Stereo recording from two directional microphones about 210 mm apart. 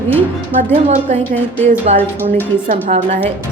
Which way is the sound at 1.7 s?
35° right (ahead or behind).